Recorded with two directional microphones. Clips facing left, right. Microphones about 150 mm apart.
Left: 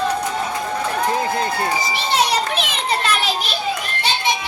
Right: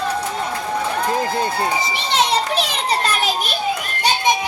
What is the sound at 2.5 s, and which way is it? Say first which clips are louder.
Children playing: right 2 dB; 35° right (ahead or behind).